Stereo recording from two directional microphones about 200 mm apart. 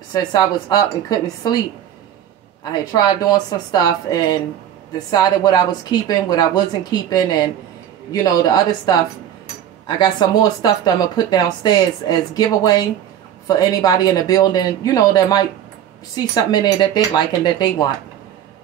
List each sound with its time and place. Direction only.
0.1 s speech: 20° left (ahead or behind)
2.8 s speech: 20° left (ahead or behind)
16.4 s speech: 20° left (ahead or behind)